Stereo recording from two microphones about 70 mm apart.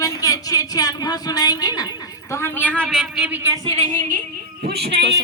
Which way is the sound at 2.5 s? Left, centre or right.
Centre.